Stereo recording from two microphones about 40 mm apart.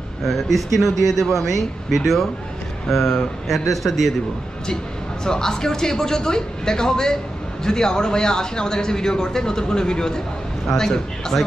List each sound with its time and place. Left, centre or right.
0.3 s speech: centre
5.2 s speech: centre